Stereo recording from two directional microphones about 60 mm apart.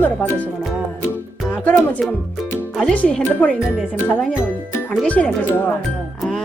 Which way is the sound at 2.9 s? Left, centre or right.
Centre.